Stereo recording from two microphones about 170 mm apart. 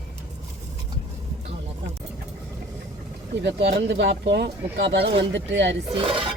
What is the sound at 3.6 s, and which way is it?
Speech, 80° right.